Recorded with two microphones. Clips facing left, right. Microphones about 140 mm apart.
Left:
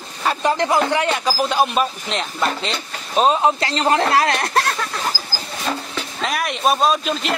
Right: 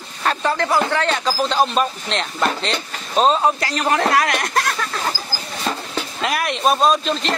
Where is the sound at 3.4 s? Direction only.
25° left (ahead or behind).